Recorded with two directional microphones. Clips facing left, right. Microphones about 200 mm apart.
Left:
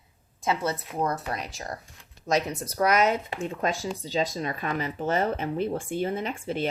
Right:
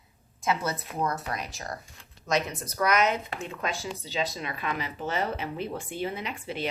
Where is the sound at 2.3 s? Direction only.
30° left (ahead or behind).